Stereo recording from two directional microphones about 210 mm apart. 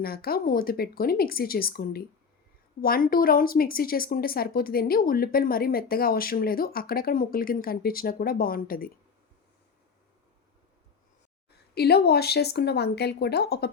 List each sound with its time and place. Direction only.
0.0 s a woman's voice: 45° left (ahead or behind)
11.7 s a woman's voice: 50° left (ahead or behind)